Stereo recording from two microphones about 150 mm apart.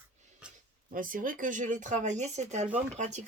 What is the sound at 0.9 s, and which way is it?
Speech, 65° right (ahead or behind).